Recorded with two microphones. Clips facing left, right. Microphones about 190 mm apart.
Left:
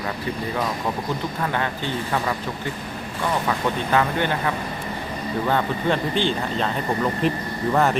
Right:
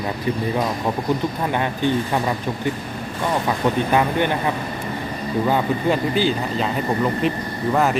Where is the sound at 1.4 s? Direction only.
15° right (ahead or behind).